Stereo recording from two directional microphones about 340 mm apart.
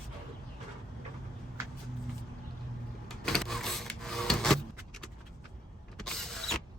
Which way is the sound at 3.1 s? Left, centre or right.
Centre.